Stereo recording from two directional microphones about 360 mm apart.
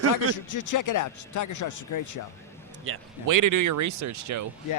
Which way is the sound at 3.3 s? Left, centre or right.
Right.